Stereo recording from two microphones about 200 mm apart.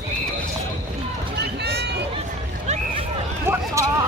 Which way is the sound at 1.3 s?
55° right (ahead or behind).